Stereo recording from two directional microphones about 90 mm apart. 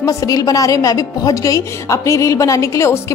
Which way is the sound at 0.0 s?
40° left (ahead or behind).